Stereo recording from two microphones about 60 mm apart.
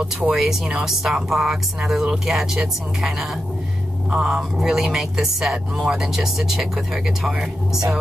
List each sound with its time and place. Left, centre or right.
0.0 s speech: centre
0.4 s speech: centre